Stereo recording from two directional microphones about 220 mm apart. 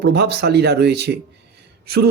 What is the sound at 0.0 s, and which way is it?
A man's voice, 45° right (ahead or behind).